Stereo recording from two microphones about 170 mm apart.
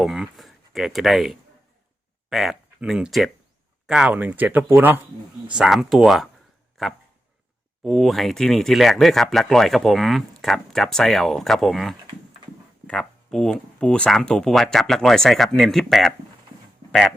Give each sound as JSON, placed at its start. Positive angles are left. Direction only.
{"t": 0.0, "sound": "speech", "side_deg": 0}